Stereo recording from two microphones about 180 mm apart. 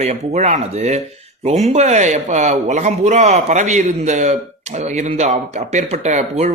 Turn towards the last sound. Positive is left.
turn(degrees=-40)  # may be behind; listen again after turning